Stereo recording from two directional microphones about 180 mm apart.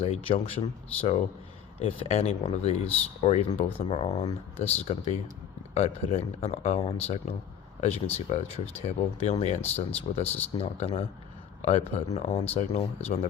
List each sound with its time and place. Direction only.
0.0 s speech: 35° left (ahead or behind)
1.8 s speech: 35° left (ahead or behind)